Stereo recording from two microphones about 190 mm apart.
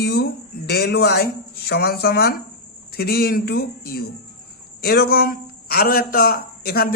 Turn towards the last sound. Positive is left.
turn(degrees=55)  # may be behind; listen again after turning